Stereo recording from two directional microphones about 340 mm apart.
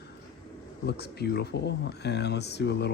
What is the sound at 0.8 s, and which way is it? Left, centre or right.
Speech, left.